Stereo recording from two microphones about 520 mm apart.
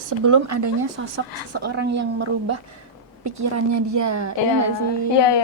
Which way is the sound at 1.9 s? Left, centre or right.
Right.